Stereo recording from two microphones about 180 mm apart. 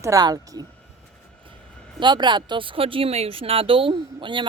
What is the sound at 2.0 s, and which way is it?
Speech, 25° right (ahead or behind).